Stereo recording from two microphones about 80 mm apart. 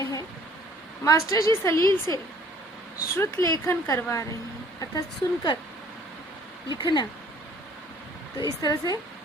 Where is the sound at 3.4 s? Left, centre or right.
Left.